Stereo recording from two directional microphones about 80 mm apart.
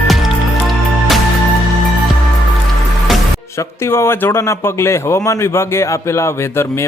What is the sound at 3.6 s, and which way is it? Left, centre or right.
A man's voice, left.